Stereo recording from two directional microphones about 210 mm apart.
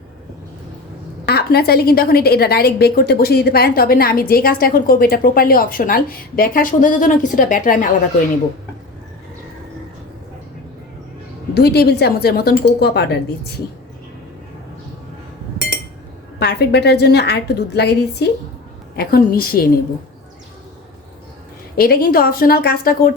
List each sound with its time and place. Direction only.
1.2 s a woman's voice: 50° left (ahead or behind)
11.5 s a woman's voice: 50° left (ahead or behind)
16.4 s a woman's voice: 50° left (ahead or behind)
21.8 s a woman's voice: 45° left (ahead or behind)